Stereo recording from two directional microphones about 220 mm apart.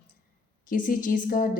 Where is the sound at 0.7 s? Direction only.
35° left (ahead or behind).